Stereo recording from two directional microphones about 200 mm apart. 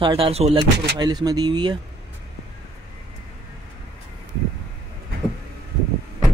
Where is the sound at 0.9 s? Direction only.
20° right (ahead or behind).